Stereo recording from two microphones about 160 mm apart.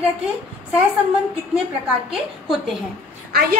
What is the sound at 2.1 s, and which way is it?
Speech, centre (ahead or behind).